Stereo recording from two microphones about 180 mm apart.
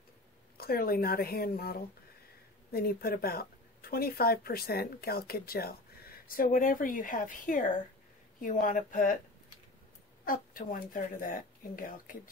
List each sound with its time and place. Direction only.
0.6 s speech: 55° left (ahead or behind)
10.2 s speech: 50° left (ahead or behind)